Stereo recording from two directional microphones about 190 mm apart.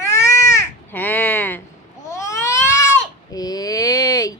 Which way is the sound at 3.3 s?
20° left (ahead or behind).